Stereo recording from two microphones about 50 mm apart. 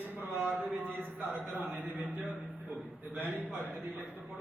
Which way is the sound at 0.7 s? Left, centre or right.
Right.